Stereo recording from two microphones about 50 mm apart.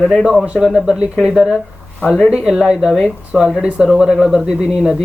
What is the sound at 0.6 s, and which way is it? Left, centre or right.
Speech, centre.